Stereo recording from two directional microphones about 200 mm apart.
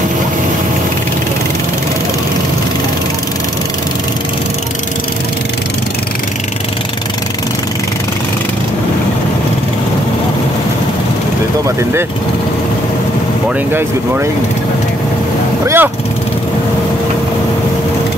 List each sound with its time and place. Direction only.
15.6 s speech: 10° right (ahead or behind)